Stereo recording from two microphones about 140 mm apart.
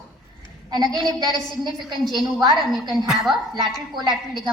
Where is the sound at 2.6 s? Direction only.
Centre (ahead or behind).